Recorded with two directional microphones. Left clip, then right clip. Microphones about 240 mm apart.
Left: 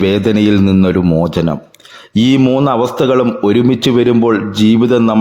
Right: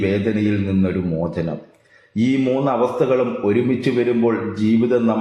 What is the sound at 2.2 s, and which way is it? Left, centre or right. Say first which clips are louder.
A man's voice: left 8 dB; left.